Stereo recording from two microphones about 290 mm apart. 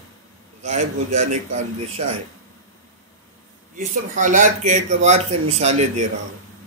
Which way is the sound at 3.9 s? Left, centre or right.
Right.